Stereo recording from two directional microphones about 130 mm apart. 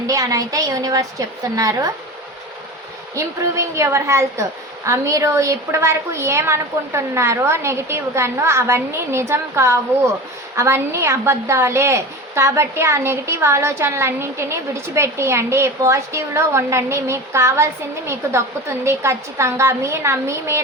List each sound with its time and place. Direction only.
0.1 s a woman's voice: 25° right (ahead or behind)
3.2 s a woman's voice: 20° right (ahead or behind)